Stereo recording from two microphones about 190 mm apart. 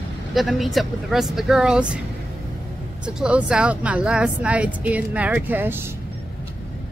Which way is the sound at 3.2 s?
5° right (ahead or behind).